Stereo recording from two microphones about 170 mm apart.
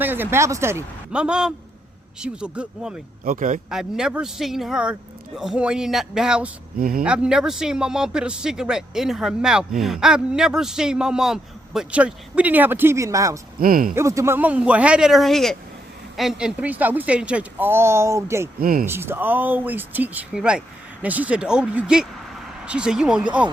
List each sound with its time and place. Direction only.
0.0 s a woman's voice: 10° right (ahead or behind)
3.2 s speech: 50° right (ahead or behind)
3.7 s a man's voice: 5° right (ahead or behind)
6.7 s speech: 60° right (ahead or behind)
7.0 s a man's voice: 5° right (ahead or behind)
13.6 s speech: 55° right (ahead or behind)
13.9 s a woman's voice: 15° right (ahead or behind)
18.6 s speech: 60° right (ahead or behind)
18.9 s a woman's voice: 15° right (ahead or behind)